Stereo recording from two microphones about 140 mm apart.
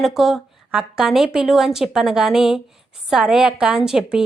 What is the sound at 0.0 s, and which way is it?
A woman's voice, centre (ahead or behind).